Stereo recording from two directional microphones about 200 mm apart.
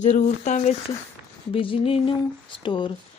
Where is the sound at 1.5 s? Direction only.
25° left (ahead or behind).